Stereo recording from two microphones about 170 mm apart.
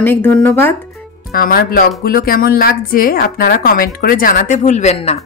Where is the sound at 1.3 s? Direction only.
60° left (ahead or behind).